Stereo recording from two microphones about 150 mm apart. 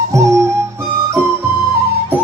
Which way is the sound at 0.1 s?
20° right (ahead or behind).